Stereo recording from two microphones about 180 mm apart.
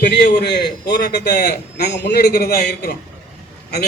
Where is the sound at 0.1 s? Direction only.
70° left (ahead or behind).